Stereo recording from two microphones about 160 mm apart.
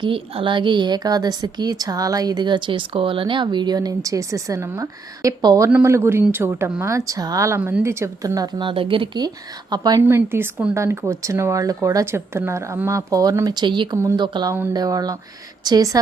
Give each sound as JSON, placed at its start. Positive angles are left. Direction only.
{"t": 0.0, "sound": "a woman's voice", "side_deg": -30}
{"t": 13.9, "sound": "speech", "side_deg": -15}
{"t": 14.2, "sound": "a woman's voice", "side_deg": -30}